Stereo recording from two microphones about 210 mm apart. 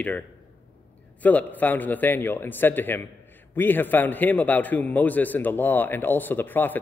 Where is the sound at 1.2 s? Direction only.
5° left (ahead or behind).